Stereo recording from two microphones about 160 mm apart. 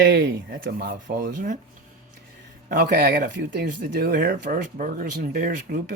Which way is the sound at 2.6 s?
70° right (ahead or behind).